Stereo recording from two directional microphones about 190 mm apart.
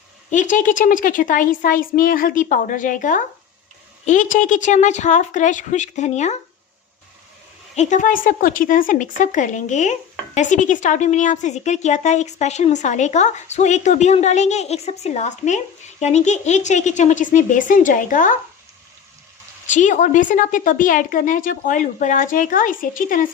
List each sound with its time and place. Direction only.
0.3 s a woman's voice: 40° left (ahead or behind)
7.8 s speech: 40° left (ahead or behind)
19.7 s a woman's voice: 40° left (ahead or behind)